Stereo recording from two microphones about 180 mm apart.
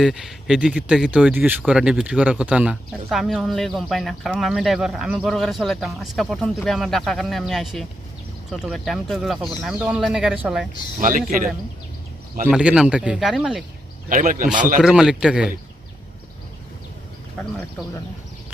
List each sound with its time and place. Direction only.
0.0 s speech: centre (ahead or behind)
11.0 s speech: 50° right (ahead or behind)
12.5 s speech: 5° right (ahead or behind)
14.1 s speech: 45° right (ahead or behind)
14.8 s speech: 5° right (ahead or behind)